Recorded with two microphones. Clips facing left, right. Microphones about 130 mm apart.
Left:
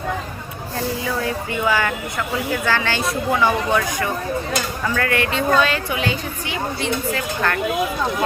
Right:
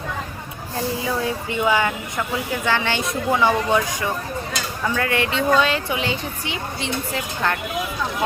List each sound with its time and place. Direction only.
1.6 s speech: 20° right (ahead or behind)